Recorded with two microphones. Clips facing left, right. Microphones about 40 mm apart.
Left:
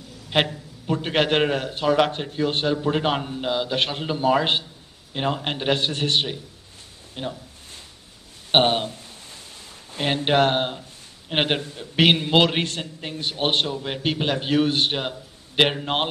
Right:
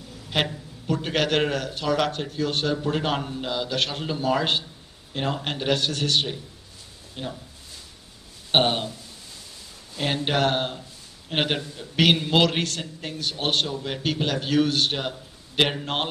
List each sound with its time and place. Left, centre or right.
0.3 s a man's voice: left
8.5 s speech: left
9.9 s a man's voice: left